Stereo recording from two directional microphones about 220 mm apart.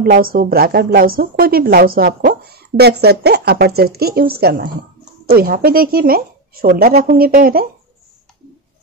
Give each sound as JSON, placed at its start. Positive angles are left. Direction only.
{"t": 0.0, "sound": "a woman's voice", "side_deg": -40}